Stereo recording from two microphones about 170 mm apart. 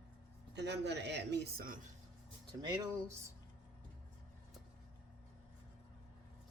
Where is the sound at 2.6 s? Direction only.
20° right (ahead or behind).